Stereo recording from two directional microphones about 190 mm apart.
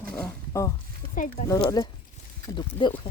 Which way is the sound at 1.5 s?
20° left (ahead or behind).